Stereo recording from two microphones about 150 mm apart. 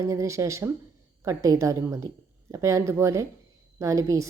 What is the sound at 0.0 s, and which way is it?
A woman's voice, 20° right (ahead or behind).